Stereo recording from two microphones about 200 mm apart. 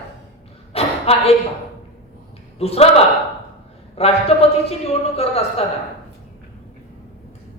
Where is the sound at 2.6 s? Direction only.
30° left (ahead or behind).